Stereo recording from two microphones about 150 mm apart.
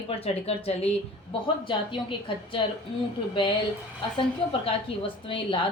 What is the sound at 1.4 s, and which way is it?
Speech, 35° left (ahead or behind).